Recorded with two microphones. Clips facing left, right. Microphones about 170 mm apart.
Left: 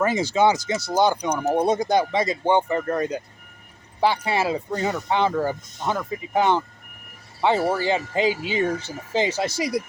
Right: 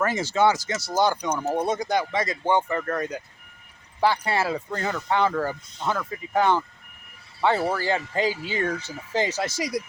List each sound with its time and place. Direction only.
0.0 s speech: 15° left (ahead or behind)
1.8 s speech: 30° left (ahead or behind)
4.2 s speech: 20° left (ahead or behind)